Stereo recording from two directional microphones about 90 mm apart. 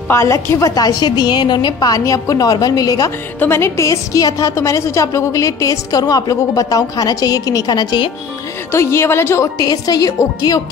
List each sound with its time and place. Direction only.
0.1 s a woman's voice: 30° left (ahead or behind)
3.3 s a woman's voice: 25° left (ahead or behind); by 8.0 s 55° left (ahead or behind)
8.7 s a woman's voice: 30° left (ahead or behind)
9.7 s a woman's voice: 45° left (ahead or behind)